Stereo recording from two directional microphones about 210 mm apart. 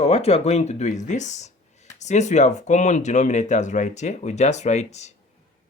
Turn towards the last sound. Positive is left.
turn(degrees=35)  # may be behind; listen again after turning